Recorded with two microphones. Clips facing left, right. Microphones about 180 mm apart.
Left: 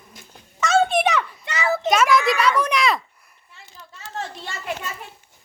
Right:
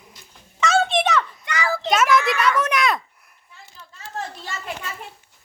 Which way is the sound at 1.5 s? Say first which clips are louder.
Left 2 dB; 25° left (ahead or behind).